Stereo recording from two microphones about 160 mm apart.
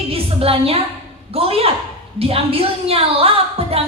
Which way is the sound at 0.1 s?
35° right (ahead or behind).